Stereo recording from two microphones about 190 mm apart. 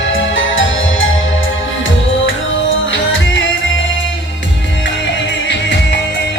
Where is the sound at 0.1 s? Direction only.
90° left.